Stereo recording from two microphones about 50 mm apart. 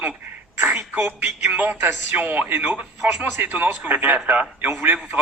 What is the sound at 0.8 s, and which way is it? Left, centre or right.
Speech, right.